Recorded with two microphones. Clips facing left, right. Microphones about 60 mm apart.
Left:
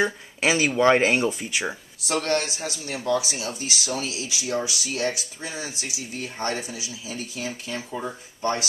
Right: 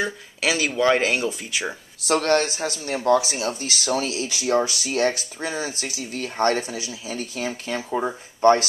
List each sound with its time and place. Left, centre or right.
0.0 s speech: centre
1.4 s speech: centre
2.0 s speech: right